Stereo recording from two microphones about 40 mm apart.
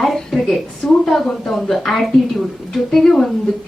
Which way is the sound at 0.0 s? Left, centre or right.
Centre.